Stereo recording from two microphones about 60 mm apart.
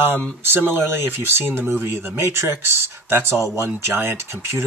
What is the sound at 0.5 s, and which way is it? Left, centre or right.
Speech, right.